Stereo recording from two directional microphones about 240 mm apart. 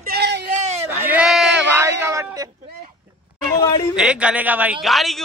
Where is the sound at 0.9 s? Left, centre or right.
Centre.